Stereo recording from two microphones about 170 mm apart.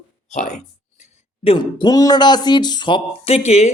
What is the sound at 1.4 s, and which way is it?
Speech, 30° left (ahead or behind).